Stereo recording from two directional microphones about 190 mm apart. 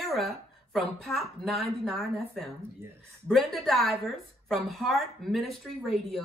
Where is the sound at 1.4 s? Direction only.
Centre (ahead or behind).